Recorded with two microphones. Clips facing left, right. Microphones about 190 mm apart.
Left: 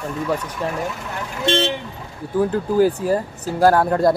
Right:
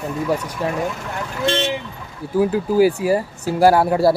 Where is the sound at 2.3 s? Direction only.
10° right (ahead or behind).